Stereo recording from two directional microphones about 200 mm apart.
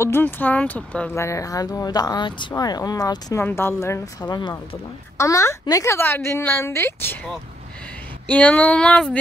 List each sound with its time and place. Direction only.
0.0 s speech: 10° left (ahead or behind)
8.3 s speech: 5° left (ahead or behind)